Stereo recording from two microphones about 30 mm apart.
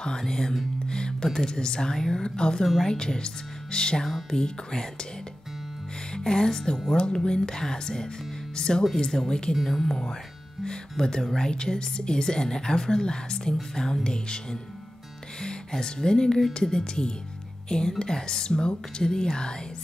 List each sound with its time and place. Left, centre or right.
0.0 s a woman's voice: left
6.1 s a woman's voice: left